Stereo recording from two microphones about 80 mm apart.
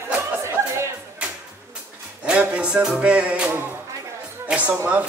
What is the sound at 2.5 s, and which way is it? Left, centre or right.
Speech, centre.